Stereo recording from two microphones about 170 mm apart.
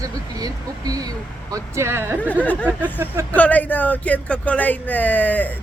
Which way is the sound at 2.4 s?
10° left (ahead or behind).